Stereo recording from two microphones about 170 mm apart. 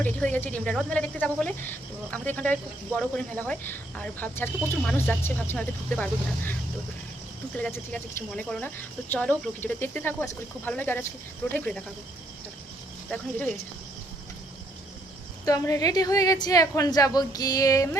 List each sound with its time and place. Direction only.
0.0 s speech: 10° left (ahead or behind)
15.4 s a woman's voice: 20° left (ahead or behind)